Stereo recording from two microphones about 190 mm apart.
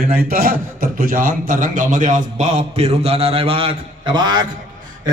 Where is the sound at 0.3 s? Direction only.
50° right (ahead or behind); by 4.4 s 25° right (ahead or behind).